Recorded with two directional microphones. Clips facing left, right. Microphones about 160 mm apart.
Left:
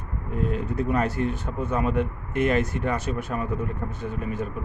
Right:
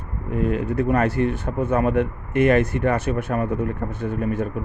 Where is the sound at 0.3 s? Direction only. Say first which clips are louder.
Right 5 dB; 65° right (ahead or behind).